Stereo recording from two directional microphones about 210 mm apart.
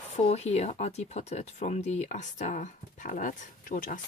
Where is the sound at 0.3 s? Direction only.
30° left (ahead or behind).